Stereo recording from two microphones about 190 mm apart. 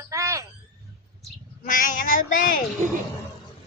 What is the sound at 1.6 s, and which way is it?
Speech, 45° left (ahead or behind).